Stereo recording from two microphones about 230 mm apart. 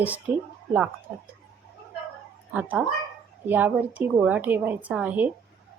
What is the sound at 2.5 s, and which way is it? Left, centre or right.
A woman's voice, centre.